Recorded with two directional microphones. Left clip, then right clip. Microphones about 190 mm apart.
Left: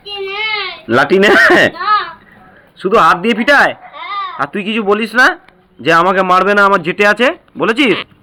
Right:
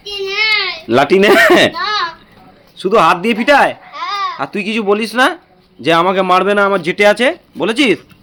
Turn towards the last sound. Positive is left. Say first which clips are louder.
# left 1 dB
turn(degrees=0)  # may be behind; listen again after turning